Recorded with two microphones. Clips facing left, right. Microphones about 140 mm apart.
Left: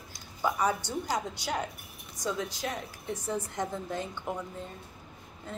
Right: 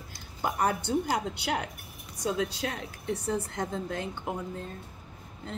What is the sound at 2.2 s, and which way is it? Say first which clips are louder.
Speech: right 3 dB; 65° right (ahead or behind).